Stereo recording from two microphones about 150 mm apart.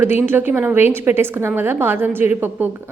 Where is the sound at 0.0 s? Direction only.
15° right (ahead or behind).